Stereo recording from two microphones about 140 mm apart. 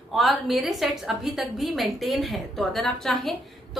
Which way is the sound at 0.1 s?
Centre (ahead or behind).